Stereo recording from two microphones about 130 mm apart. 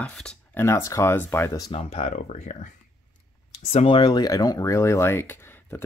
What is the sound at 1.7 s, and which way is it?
Speech, 55° left (ahead or behind).